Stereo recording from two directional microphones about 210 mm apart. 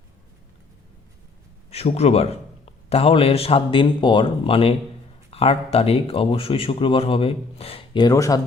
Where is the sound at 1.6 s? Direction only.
30° left (ahead or behind).